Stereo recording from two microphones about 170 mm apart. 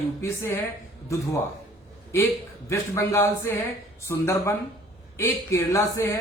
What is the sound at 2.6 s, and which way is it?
Speech, 15° left (ahead or behind).